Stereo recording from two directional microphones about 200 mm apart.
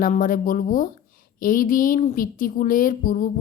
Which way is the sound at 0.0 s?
45° left (ahead or behind).